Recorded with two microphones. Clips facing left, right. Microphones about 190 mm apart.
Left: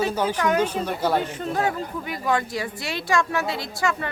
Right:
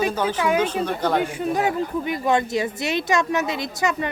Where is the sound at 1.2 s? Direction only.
10° right (ahead or behind).